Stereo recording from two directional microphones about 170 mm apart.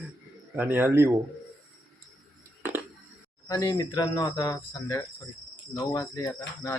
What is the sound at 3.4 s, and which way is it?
Speech, 20° left (ahead or behind).